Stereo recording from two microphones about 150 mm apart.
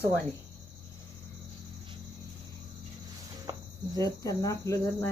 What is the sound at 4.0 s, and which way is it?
Speech, 25° left (ahead or behind).